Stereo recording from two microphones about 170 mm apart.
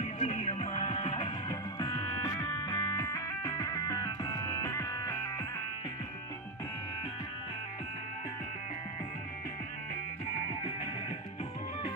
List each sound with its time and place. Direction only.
0.0 s music: 40° left (ahead or behind); by 5.5 s 20° left (ahead or behind)